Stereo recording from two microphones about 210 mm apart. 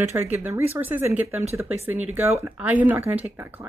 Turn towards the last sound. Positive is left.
turn(degrees=-10)  # may be behind; listen again after turning